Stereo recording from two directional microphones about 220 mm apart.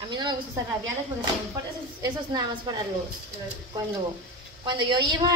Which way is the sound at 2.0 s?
20° right (ahead or behind).